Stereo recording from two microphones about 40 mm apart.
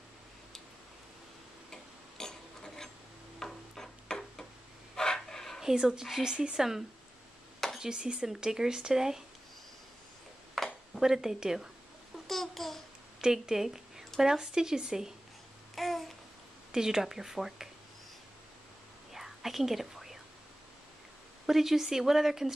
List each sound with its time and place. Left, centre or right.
1.7 s tick-tock: centre
3.4 s a sound: centre
5.6 s speech: centre
7.8 s speech: right
10.6 s a sound: centre
11.0 s speech: centre
12.3 s babbling: centre
13.2 s speech: centre
15.7 s babbling: centre
16.7 s speech: centre
19.1 s whispering: centre
21.5 s speech: centre